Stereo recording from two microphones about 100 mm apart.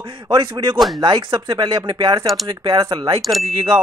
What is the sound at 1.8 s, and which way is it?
Speech, 45° right (ahead or behind).